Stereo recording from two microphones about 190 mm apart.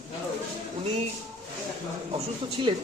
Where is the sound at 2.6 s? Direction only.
25° right (ahead or behind).